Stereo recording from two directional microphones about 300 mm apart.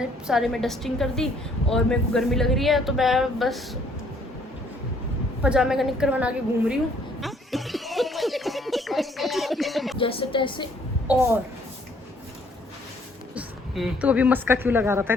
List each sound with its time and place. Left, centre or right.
0.0 s a woman's voice: centre
5.4 s a woman's voice: centre
7.2 s a sound: centre
10.0 s speech: centre
13.3 s a woman's voice: centre